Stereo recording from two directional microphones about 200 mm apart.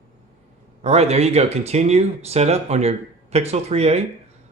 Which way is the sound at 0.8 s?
30° right (ahead or behind).